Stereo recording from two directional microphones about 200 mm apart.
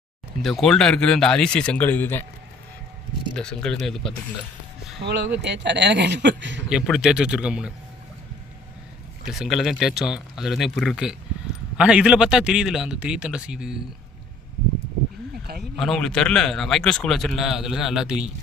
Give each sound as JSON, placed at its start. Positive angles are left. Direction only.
{"t": 0.4, "sound": "a man's voice", "side_deg": 0}
{"t": 3.3, "sound": "a man's voice", "side_deg": 5}
{"t": 5.4, "sound": "speech", "side_deg": -60}
{"t": 6.7, "sound": "a man's voice", "side_deg": -5}
{"t": 9.2, "sound": "a man's voice", "side_deg": 0}
{"t": 15.8, "sound": "a man's voice", "side_deg": 0}